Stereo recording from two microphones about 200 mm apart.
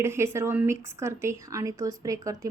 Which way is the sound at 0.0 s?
15° right (ahead or behind).